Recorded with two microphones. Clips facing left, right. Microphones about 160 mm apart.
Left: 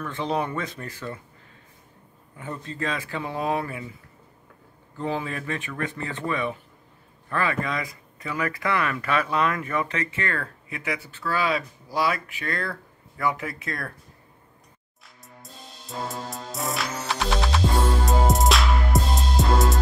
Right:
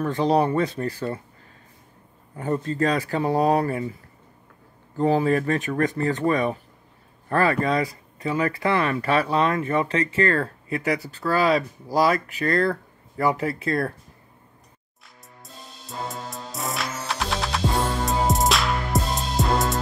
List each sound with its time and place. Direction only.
0.0 s speech: 40° right (ahead or behind)
2.3 s speech: 45° right (ahead or behind)
4.9 s speech: 40° right (ahead or behind)
15.0 s music: centre (ahead or behind)